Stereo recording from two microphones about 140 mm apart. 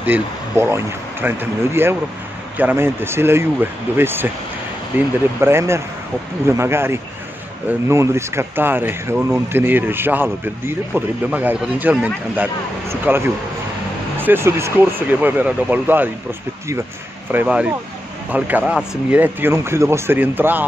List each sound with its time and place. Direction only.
0.0 s speech: 15° right (ahead or behind)
5.4 s speech: 20° right (ahead or behind)